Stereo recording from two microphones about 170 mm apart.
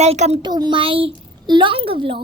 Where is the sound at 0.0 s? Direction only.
40° right (ahead or behind).